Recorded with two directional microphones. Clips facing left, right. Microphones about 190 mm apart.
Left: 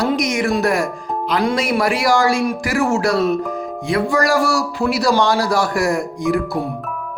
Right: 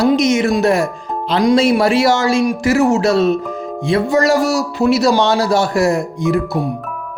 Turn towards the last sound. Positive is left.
turn(degrees=-20)  # may be behind; listen again after turning